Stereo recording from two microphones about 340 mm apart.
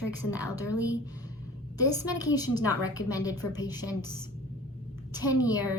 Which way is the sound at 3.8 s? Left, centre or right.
Left.